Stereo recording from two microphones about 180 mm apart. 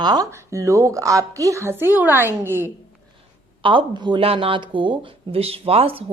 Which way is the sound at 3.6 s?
25° right (ahead or behind).